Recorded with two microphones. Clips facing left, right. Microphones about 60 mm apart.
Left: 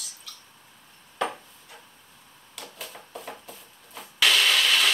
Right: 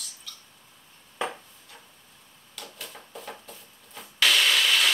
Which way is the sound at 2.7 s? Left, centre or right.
Centre.